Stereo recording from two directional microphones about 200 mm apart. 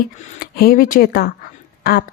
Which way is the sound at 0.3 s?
50° left (ahead or behind).